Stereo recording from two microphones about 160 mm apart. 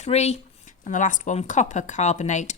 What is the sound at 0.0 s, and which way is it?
Speech, 45° left (ahead or behind).